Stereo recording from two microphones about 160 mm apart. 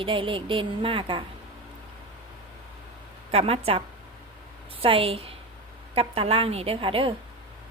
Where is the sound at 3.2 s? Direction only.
40° right (ahead or behind).